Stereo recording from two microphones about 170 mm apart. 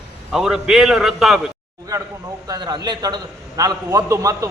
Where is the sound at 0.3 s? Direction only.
Centre (ahead or behind).